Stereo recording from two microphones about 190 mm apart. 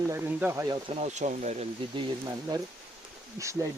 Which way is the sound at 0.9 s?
35° right (ahead or behind).